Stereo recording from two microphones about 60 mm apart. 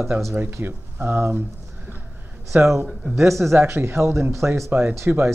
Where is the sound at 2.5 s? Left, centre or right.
Right.